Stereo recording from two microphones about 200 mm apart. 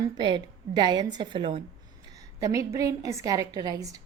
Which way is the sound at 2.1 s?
15° right (ahead or behind).